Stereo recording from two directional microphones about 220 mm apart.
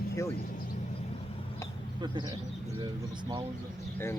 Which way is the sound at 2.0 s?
20° right (ahead or behind).